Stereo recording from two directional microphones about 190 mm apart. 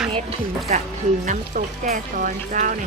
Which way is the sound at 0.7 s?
40° right (ahead or behind).